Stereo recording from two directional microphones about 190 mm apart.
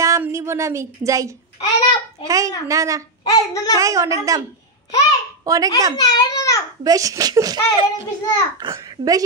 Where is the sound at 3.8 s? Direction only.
15° right (ahead or behind).